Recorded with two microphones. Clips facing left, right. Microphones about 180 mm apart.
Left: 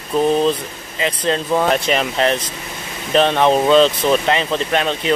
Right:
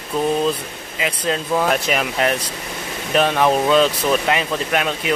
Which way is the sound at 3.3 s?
25° left (ahead or behind).